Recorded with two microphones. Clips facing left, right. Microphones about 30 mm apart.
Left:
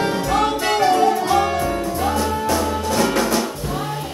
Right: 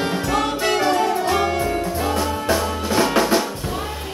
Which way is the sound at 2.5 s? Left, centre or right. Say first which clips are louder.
Left 1 dB; right.